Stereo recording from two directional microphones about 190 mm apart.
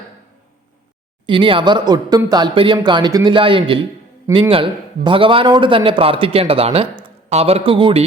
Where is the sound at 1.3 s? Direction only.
25° right (ahead or behind).